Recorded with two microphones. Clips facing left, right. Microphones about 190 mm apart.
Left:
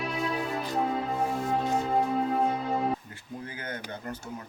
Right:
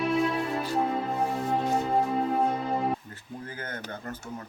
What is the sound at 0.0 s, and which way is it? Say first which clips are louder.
Music: right 5 dB; centre (ahead or behind).